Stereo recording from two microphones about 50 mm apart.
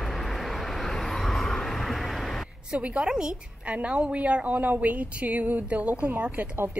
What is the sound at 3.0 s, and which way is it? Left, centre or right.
Speech, centre.